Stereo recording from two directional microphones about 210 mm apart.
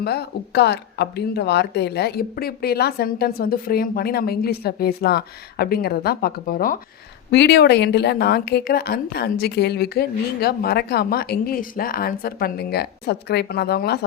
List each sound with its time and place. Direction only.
0.0 s speech: 50° left (ahead or behind)